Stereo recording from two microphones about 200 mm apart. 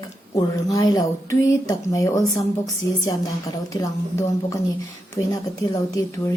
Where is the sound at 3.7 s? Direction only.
15° left (ahead or behind).